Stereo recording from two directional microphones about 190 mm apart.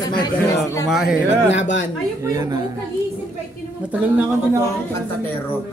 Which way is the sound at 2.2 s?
15° right (ahead or behind).